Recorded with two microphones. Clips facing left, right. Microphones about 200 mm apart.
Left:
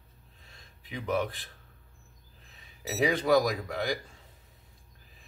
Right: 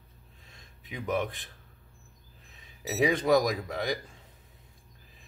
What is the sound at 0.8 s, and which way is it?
Speech, 20° right (ahead or behind).